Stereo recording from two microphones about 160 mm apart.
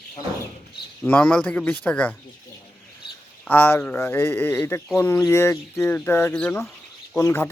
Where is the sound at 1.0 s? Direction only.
10° left (ahead or behind).